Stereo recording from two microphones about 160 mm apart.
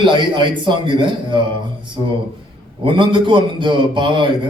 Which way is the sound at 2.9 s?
30° right (ahead or behind).